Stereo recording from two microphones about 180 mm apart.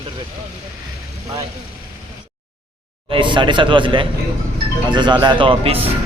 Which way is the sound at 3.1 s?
25° right (ahead or behind).